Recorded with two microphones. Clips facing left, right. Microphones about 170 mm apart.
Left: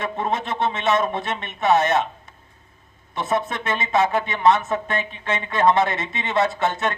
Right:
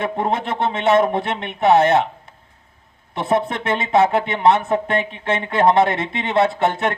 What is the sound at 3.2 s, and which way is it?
Speech, 60° right (ahead or behind).